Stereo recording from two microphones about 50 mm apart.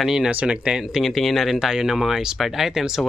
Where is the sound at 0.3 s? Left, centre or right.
Right.